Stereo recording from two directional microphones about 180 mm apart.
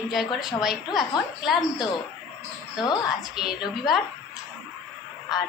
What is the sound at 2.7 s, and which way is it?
Speech, 25° left (ahead or behind).